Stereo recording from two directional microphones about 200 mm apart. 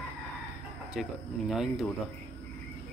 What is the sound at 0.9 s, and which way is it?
Speech, centre (ahead or behind).